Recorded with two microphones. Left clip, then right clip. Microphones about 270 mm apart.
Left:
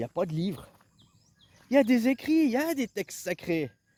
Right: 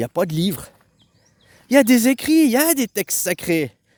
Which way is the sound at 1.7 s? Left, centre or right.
Right.